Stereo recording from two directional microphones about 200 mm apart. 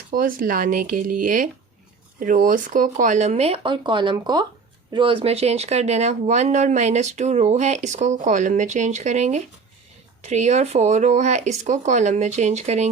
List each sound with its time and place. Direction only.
0.1 s speech: 45° right (ahead or behind)